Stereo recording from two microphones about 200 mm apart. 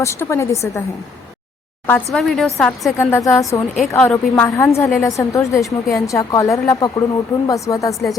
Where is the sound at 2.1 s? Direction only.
5° left (ahead or behind).